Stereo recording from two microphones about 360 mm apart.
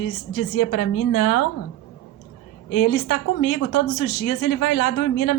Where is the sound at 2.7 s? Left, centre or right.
Left.